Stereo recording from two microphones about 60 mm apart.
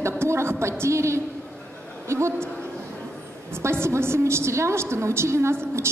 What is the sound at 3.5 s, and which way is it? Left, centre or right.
A woman's voice, right.